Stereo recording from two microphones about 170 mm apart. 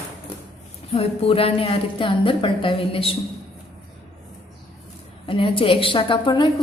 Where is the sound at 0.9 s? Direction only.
35° left (ahead or behind).